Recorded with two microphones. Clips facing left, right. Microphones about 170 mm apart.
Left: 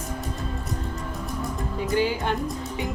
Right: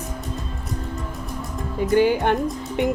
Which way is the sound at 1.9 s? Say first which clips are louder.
Right 7 dB; 55° right (ahead or behind).